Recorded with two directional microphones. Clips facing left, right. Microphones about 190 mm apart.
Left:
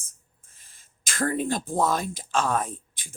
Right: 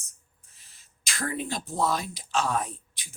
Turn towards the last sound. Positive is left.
turn(degrees=50)  # may be behind; listen again after turning